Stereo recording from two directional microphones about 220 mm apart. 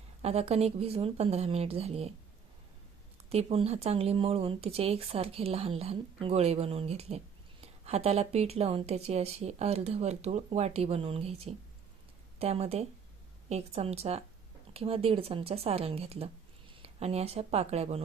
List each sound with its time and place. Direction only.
0.2 s speech: 30° right (ahead or behind)
3.2 s speech: 25° right (ahead or behind)